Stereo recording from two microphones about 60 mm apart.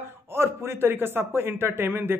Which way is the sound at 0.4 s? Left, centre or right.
Right.